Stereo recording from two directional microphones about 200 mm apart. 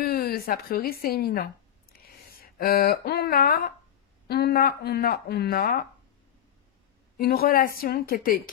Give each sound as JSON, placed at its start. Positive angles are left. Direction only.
{"t": 0.0, "sound": "a woman's voice", "side_deg": 50}
{"t": 7.2, "sound": "speech", "side_deg": 50}